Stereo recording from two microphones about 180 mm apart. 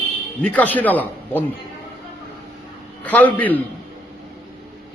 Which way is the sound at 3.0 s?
10° left (ahead or behind).